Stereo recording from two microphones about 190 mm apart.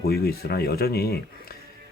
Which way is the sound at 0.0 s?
55° left (ahead or behind).